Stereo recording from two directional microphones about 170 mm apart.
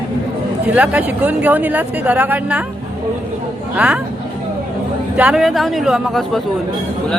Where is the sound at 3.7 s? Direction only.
5° right (ahead or behind).